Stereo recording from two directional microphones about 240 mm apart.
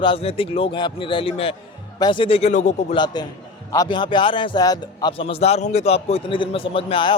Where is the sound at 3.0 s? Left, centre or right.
Centre.